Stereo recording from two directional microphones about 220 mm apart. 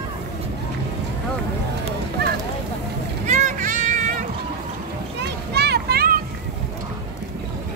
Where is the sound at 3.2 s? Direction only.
35° right (ahead or behind).